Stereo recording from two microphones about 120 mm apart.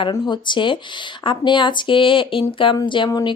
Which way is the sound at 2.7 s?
40° left (ahead or behind).